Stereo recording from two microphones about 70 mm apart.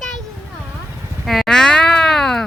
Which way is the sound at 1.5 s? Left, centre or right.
Centre.